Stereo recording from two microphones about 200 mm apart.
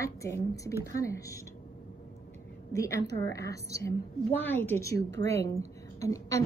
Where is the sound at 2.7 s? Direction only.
15° left (ahead or behind).